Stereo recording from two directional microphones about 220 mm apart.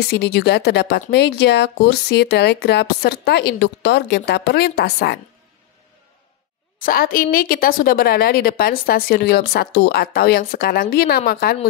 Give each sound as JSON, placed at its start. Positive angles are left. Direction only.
{"t": 0.0, "sound": "a woman's voice", "side_deg": 50}
{"t": 6.8, "sound": "a woman's voice", "side_deg": 40}